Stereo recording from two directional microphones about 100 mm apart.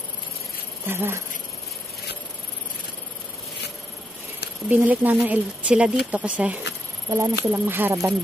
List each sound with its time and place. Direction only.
0.8 s speech: 25° right (ahead or behind)
4.6 s speech: 15° right (ahead or behind)